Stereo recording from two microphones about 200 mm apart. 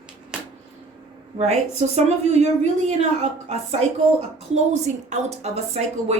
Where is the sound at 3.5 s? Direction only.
30° right (ahead or behind).